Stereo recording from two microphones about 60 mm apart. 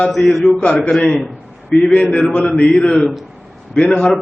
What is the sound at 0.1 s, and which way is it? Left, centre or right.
Speech, centre.